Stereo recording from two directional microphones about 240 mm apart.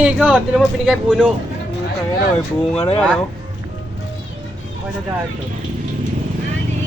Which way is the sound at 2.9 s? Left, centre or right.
Centre.